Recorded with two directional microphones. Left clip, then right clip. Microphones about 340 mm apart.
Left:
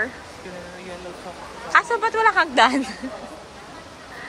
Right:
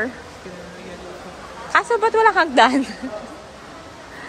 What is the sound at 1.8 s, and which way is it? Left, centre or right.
Speech, centre.